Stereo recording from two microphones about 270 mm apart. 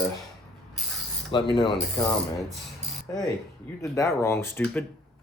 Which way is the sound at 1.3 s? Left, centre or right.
Centre.